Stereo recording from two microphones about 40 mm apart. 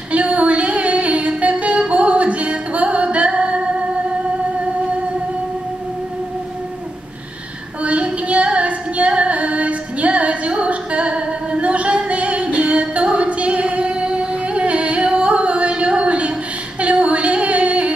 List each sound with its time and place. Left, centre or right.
0.1 s music: right
7.8 s female singing: right
16.8 s a sound: right